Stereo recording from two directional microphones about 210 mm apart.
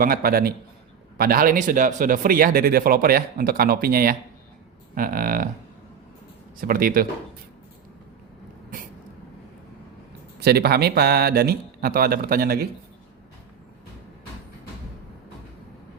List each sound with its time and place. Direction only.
0.0 s speech: 45° right (ahead or behind)
4.9 s livestock: 40° right (ahead or behind)
6.6 s speech: 45° right (ahead or behind)
10.4 s speech: 50° right (ahead or behind)